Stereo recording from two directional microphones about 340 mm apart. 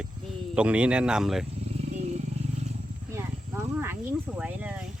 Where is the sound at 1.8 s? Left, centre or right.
Centre.